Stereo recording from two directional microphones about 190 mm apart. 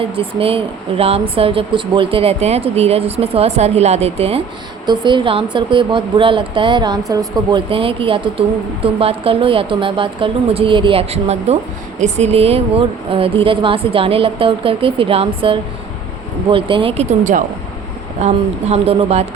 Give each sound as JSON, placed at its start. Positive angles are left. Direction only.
{"t": 0.0, "sound": "speech", "side_deg": -30}